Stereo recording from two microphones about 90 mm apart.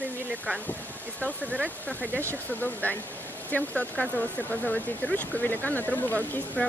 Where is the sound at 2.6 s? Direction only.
20° left (ahead or behind).